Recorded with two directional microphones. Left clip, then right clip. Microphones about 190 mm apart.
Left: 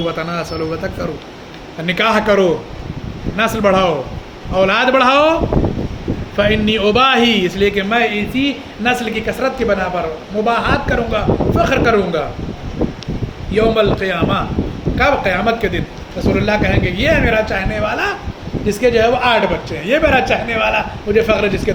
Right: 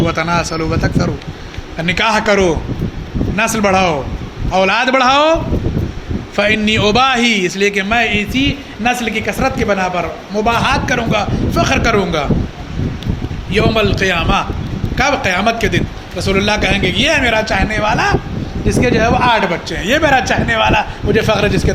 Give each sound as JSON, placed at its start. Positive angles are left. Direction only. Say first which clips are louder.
{"t": 0.0, "sound": "a man's voice", "louder": "right 5 dB", "side_deg": -25}
{"t": 13.5, "sound": "a man's voice", "louder": "left 1 dB", "side_deg": -35}
{"t": 18.7, "sound": "speech", "louder": "left 1 dB", "side_deg": -10}